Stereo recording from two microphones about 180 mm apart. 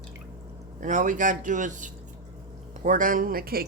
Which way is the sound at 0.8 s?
45° right (ahead or behind).